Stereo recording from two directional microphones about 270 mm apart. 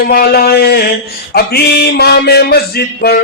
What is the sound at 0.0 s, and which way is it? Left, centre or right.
Music, left.